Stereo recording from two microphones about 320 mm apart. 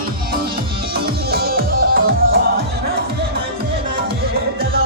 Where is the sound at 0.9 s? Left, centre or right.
Right.